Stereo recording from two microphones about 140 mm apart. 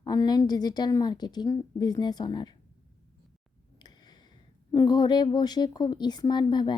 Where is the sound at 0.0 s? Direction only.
30° left (ahead or behind).